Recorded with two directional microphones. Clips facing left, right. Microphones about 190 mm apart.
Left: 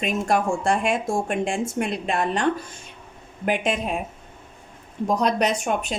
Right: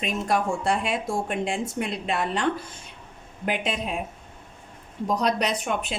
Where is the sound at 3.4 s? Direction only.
50° left (ahead or behind).